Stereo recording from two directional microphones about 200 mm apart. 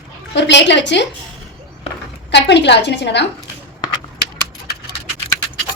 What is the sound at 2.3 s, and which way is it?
Speech, 60° left (ahead or behind).